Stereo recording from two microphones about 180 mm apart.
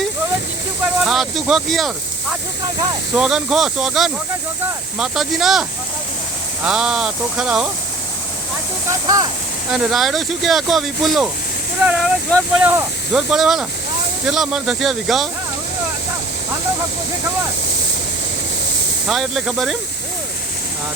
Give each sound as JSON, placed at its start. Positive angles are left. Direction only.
{"t": 1.0, "sound": "speech", "side_deg": 0}
{"t": 3.2, "sound": "speech", "side_deg": -5}
{"t": 6.7, "sound": "speech", "side_deg": -5}
{"t": 8.9, "sound": "speech", "side_deg": -20}
{"t": 9.7, "sound": "speech", "side_deg": 0}
{"t": 19.0, "sound": "speech", "side_deg": 0}